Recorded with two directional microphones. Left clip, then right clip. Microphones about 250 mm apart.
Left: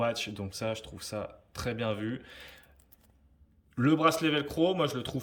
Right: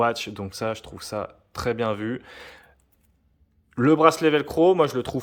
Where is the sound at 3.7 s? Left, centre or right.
Centre.